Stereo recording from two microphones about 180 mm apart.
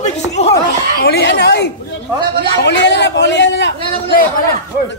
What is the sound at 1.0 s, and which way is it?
A man's voice, 65° left (ahead or behind).